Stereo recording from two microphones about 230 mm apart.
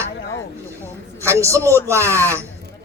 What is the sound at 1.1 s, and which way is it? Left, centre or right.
A man's voice, centre.